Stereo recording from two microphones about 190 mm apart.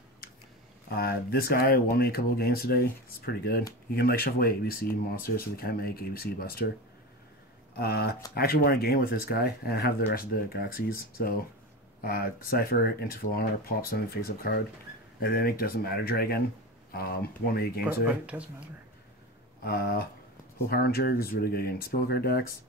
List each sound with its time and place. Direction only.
0.8 s speech: 50° left (ahead or behind)
7.7 s speech: 55° left (ahead or behind)
18.0 s speech: 5° right (ahead or behind)
19.6 s speech: 55° left (ahead or behind)